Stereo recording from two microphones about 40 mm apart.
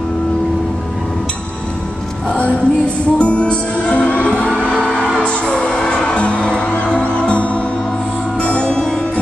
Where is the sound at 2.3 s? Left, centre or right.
Left.